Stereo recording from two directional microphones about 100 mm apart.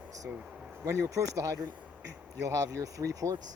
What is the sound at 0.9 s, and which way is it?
Speech, 30° right (ahead or behind).